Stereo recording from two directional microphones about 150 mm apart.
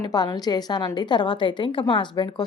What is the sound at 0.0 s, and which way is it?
A woman's voice, 25° left (ahead or behind).